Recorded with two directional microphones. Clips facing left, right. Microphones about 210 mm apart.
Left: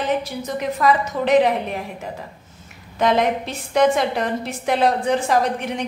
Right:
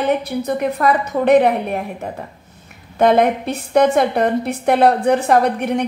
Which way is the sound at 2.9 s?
55° right (ahead or behind).